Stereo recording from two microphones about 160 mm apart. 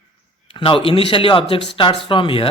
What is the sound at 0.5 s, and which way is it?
Speech, 30° left (ahead or behind).